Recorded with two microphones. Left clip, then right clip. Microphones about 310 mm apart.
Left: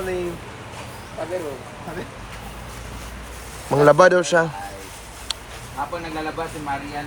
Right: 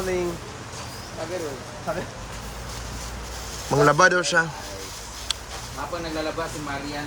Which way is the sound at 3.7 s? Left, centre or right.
Centre.